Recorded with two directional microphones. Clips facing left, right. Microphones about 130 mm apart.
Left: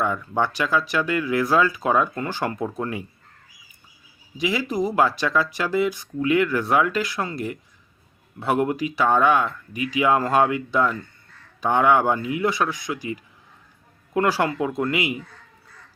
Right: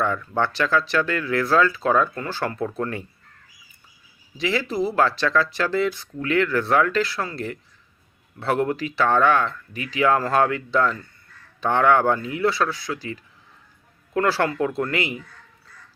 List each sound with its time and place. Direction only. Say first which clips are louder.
0.0 s speech: even; 15° left (ahead or behind)
4.4 s speech: even; 15° left (ahead or behind)